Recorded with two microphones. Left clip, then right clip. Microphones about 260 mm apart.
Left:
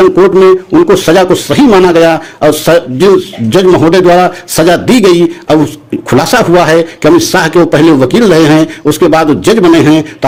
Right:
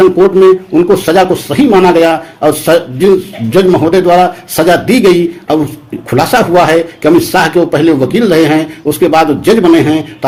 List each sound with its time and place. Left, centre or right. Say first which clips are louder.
0.0 s a man's voice: left 1 dB; left